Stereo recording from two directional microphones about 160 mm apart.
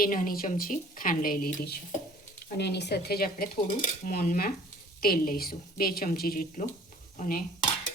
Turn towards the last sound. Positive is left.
turn(degrees=60)  # may be behind; listen again after turning